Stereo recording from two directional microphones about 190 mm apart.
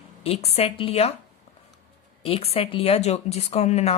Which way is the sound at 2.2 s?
30° left (ahead or behind).